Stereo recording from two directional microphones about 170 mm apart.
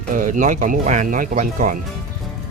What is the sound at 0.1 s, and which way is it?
Speech, 50° right (ahead or behind).